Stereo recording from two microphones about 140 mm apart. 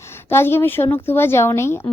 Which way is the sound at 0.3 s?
15° left (ahead or behind).